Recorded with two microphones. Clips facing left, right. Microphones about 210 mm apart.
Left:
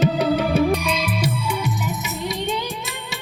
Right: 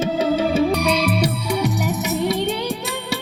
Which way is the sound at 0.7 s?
65° right (ahead or behind).